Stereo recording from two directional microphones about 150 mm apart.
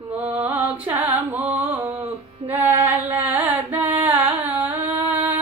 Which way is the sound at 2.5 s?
10° right (ahead or behind).